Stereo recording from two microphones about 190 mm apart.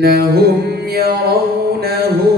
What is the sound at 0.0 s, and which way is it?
Mantra, 55° right (ahead or behind).